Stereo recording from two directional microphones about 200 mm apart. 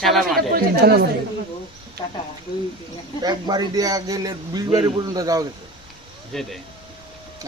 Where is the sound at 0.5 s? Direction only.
50° right (ahead or behind).